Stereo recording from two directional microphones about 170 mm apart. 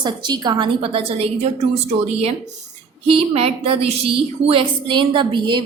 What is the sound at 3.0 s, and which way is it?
A woman's voice, 35° right (ahead or behind).